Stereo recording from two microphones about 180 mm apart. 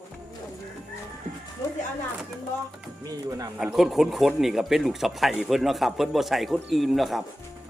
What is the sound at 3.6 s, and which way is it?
Speech, centre (ahead or behind).